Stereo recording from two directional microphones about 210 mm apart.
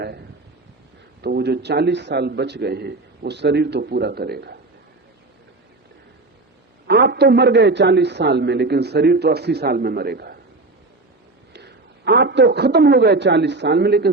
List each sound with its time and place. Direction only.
1.2 s a man's voice: 50° right (ahead or behind)
6.8 s a man's voice: 50° right (ahead or behind)
11.5 s a man's voice: 55° right (ahead or behind)